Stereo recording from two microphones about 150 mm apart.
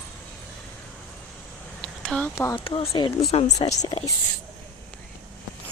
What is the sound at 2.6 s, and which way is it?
Speech, 35° left (ahead or behind).